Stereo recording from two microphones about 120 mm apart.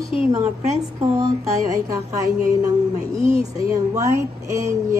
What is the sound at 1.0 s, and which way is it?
Speech, 30° right (ahead or behind).